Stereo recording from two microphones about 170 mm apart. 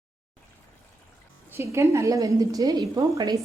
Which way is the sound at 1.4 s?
15° right (ahead or behind).